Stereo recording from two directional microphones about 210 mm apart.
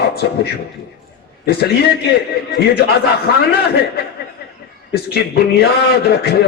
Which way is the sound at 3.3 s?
50° left (ahead or behind).